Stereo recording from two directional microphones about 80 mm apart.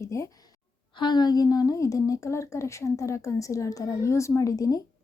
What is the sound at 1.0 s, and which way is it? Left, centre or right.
Speech, left.